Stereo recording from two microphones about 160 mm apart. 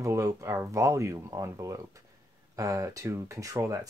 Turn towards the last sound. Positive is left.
turn(degrees=-20)  # may be behind; listen again after turning